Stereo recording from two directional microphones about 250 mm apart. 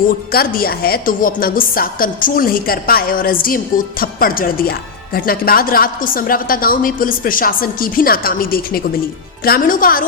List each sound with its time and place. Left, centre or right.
0.1 s a woman's voice: left